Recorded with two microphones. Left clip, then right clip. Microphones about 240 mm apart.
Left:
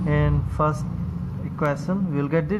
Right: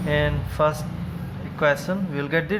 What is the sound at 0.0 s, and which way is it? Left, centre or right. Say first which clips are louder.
Speech: right 2 dB; centre.